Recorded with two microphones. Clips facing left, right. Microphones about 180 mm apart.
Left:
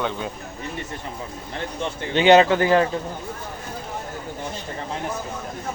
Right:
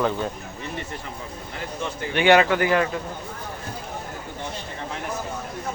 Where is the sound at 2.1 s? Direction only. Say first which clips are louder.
Left 3 dB; 25° left (ahead or behind).